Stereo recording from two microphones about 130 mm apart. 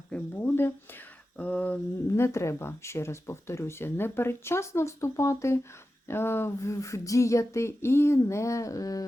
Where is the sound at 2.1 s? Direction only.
20° left (ahead or behind).